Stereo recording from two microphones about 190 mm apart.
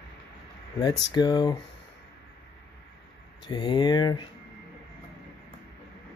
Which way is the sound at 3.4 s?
25° left (ahead or behind).